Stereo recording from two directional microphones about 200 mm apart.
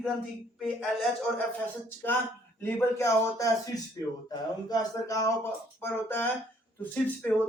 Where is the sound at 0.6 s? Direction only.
Centre (ahead or behind).